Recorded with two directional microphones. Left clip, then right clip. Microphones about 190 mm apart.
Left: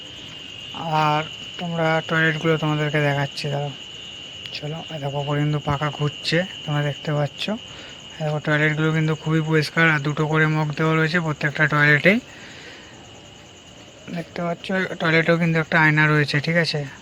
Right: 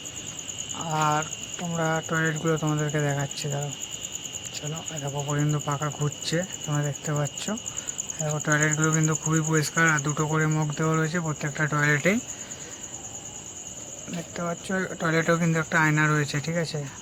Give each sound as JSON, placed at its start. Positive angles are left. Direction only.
{"t": 0.8, "sound": "speech", "side_deg": 20}
{"t": 14.2, "sound": "speech", "side_deg": 20}